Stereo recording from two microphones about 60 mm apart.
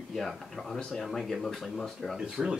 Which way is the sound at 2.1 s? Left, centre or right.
Centre.